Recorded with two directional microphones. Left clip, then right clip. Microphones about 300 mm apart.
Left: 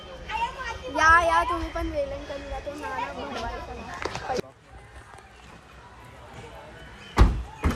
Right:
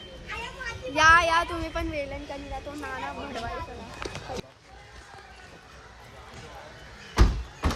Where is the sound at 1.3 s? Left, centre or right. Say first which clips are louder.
Left 2 dB; centre.